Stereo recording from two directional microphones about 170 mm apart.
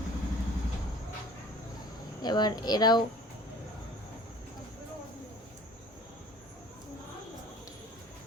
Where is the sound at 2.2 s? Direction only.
25° left (ahead or behind).